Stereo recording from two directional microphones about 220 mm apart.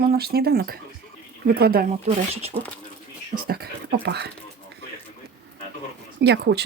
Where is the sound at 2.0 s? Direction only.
30° right (ahead or behind).